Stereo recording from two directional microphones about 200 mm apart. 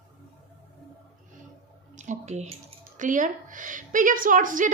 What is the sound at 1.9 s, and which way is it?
A woman's voice, 35° right (ahead or behind).